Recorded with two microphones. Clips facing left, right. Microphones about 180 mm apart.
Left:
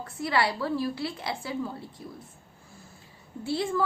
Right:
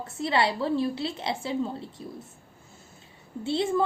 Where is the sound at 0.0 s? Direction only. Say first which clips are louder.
Right 2 dB; 25° right (ahead or behind).